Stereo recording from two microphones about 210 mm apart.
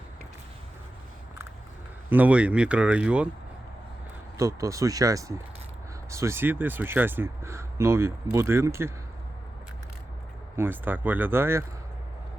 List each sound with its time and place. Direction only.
2.0 s speech: 5° right (ahead or behind)
4.4 s speech: 15° right (ahead or behind)
10.6 s speech: 10° right (ahead or behind)